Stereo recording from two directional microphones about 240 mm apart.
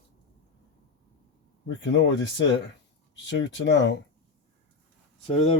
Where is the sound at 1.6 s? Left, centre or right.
Left.